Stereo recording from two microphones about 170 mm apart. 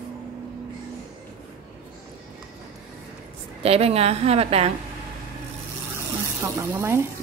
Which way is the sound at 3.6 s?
35° right (ahead or behind).